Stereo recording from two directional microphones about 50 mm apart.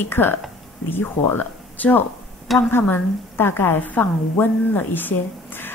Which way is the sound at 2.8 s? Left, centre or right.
Left.